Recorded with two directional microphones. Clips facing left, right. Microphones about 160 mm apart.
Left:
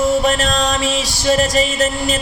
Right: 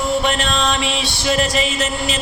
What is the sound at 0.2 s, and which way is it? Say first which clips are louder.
Music: left 3 dB; 40° left (ahead or behind).